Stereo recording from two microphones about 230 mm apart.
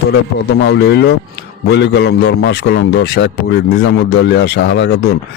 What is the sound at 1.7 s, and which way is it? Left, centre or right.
A man's voice, left.